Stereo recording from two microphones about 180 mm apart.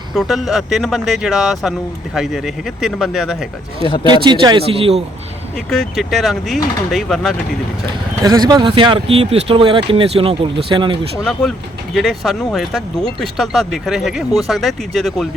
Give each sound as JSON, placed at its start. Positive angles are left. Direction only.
{"t": 0.1, "sound": "speech", "side_deg": 0}
{"t": 4.0, "sound": "speech", "side_deg": -25}
{"t": 5.5, "sound": "speech", "side_deg": 5}
{"t": 8.2, "sound": "speech", "side_deg": -20}
{"t": 11.2, "sound": "speech", "side_deg": 0}